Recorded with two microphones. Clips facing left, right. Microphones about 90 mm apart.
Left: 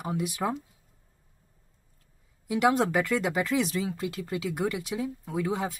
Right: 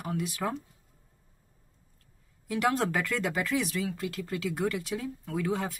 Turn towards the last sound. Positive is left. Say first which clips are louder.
# left 1 dB
turn(degrees=15)  # may be behind; listen again after turning